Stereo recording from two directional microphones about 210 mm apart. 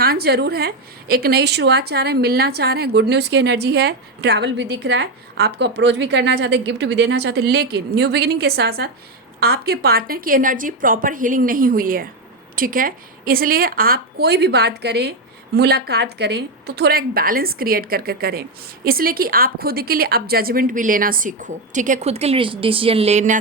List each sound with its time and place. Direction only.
0.0 s a woman's voice: 45° right (ahead or behind)